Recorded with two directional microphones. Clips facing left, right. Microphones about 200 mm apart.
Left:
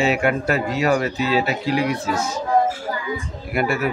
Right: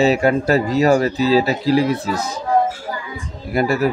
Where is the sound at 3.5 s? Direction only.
35° right (ahead or behind).